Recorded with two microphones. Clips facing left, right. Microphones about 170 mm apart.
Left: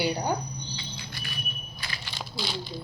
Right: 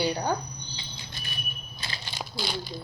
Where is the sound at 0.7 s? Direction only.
25° right (ahead or behind).